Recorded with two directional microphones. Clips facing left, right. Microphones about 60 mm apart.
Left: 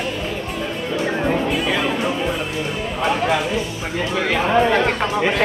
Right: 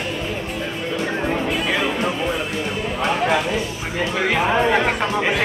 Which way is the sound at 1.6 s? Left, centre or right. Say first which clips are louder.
Left 1 dB; centre.